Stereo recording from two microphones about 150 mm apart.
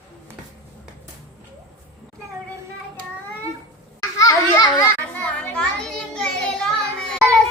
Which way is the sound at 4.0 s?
20° left (ahead or behind).